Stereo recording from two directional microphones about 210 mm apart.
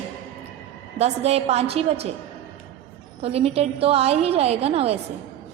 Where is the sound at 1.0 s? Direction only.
30° right (ahead or behind).